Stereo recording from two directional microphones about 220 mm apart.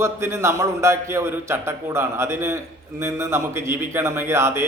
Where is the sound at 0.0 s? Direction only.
10° right (ahead or behind).